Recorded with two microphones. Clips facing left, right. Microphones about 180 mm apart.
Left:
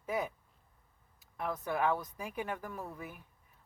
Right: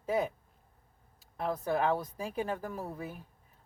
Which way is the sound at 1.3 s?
35° right (ahead or behind).